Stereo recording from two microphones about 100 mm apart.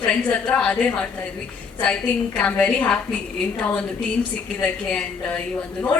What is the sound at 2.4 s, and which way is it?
Speech, 10° left (ahead or behind).